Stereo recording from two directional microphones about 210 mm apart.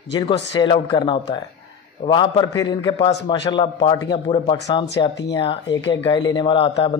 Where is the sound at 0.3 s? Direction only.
25° left (ahead or behind).